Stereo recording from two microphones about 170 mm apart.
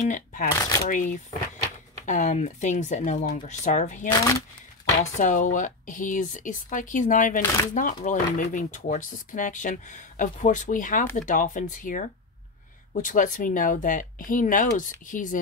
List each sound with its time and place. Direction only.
0.0 s speech: 50° left (ahead or behind)
0.6 s speech: 20° left (ahead or behind)
0.8 s speech: 50° left (ahead or behind)
4.1 s speech: 20° left (ahead or behind)
5.0 s speech: 45° left (ahead or behind)